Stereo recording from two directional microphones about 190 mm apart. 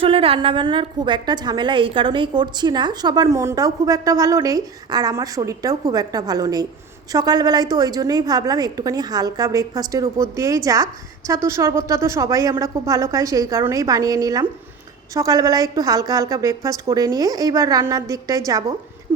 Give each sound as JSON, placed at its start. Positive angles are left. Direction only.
{"t": 0.0, "sound": "a woman's voice", "side_deg": -30}